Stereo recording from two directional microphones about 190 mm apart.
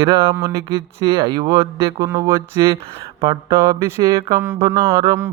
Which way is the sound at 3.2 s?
15° right (ahead or behind).